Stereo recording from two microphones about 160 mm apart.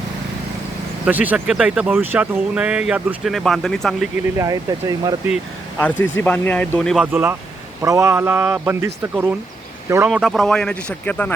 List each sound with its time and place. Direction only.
1.0 s speech: 10° right (ahead or behind)
4.4 s speech: 20° right (ahead or behind)
5.8 s speech: 10° left (ahead or behind)
7.0 s speech: 15° right (ahead or behind)
10.1 s speech: centre (ahead or behind)